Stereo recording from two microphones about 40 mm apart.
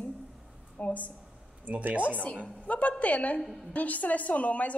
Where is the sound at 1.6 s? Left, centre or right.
Right.